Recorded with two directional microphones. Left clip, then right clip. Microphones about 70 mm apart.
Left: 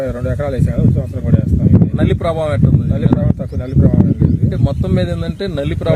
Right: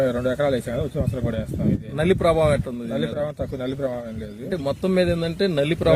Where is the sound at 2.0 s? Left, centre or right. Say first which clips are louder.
Right 3 dB; right.